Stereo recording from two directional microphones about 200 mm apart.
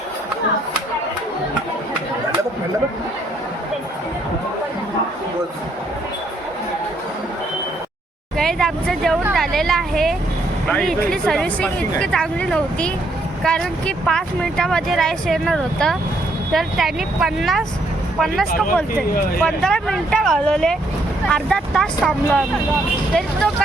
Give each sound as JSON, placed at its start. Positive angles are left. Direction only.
{"t": 8.4, "sound": "vehicle", "side_deg": 0}
{"t": 9.3, "sound": "speech", "side_deg": 0}
{"t": 18.9, "sound": "speech", "side_deg": 45}
{"t": 19.4, "sound": "speech", "side_deg": 5}